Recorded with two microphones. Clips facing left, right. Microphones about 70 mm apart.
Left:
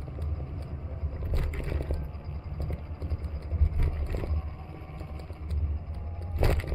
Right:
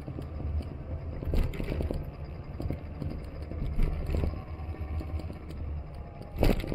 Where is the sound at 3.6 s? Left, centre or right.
Left.